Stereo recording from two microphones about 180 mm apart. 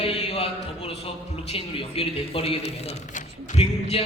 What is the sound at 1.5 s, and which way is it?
A man's voice, 35° left (ahead or behind).